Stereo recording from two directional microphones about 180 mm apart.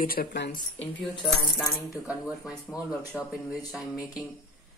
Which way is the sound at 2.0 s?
5° right (ahead or behind).